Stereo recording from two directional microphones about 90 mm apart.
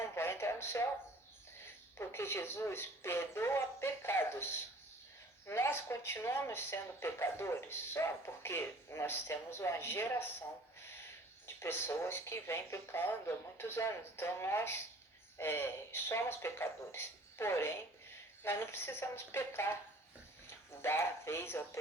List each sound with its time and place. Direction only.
0.0 s a sound: 25° left (ahead or behind)
1.6 s speech: 25° left (ahead or behind)
5.5 s speech: 25° left (ahead or behind)
10.8 s a sound: 25° left (ahead or behind)
11.4 s speech: 25° left (ahead or behind)
20.8 s speech: 30° left (ahead or behind)